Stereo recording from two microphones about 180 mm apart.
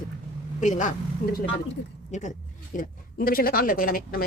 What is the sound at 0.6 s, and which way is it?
Speech, 45° left (ahead or behind).